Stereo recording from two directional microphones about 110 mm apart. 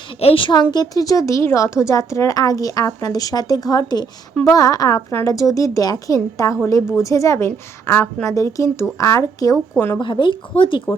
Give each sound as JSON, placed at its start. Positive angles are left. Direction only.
{"t": 0.2, "sound": "a woman's voice", "side_deg": 60}
{"t": 9.7, "sound": "a woman's voice", "side_deg": 20}
{"t": 10.0, "sound": "speech", "side_deg": 50}